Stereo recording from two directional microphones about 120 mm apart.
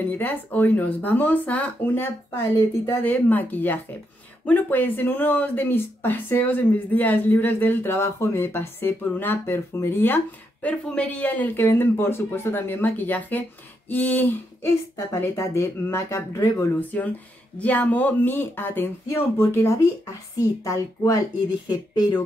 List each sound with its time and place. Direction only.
0.2 s speech: 15° left (ahead or behind)
16.9 s a woman's voice: 10° left (ahead or behind); by 21.2 s 25° left (ahead or behind)
21.6 s speech: 40° left (ahead or behind)